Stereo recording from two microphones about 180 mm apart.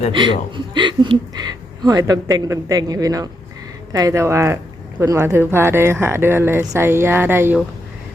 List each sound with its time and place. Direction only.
0.1 s speech: 25° right (ahead or behind)